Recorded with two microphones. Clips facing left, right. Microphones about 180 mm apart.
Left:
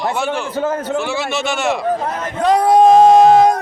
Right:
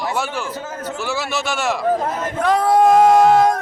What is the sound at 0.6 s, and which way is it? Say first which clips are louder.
Speech: left 9 dB; 60° left (ahead or behind).